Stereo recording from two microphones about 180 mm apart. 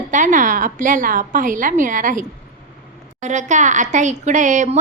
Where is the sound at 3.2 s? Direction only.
40° right (ahead or behind).